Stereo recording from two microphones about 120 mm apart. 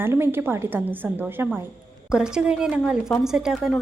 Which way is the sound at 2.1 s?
5° right (ahead or behind).